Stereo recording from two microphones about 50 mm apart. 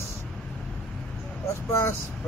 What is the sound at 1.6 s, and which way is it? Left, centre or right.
Speech, left.